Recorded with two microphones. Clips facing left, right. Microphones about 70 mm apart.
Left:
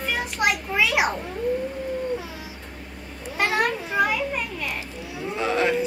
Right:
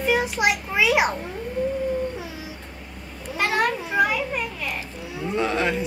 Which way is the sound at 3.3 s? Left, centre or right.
Centre.